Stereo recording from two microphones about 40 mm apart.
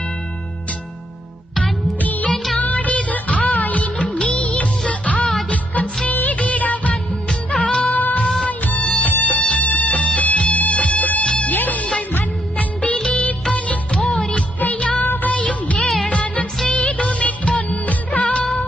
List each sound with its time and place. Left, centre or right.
2.0 s music: left
2.3 s music of bollywood: centre
2.6 s music of bollywood: left
4.9 s music: left
6.1 s music of bollywood: left
7.5 s music: left
7.9 s music: left
13.1 s music of bollywood: left
13.9 s music: left
15.0 s music: left
16.0 s music of bollywood: left